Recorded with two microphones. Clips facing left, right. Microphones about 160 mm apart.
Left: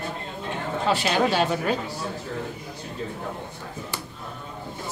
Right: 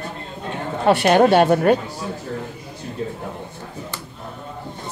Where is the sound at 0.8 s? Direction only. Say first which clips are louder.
Right 9 dB; 60° right (ahead or behind).